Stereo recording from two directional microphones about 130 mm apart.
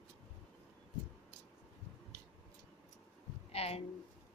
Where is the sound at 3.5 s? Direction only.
50° left (ahead or behind).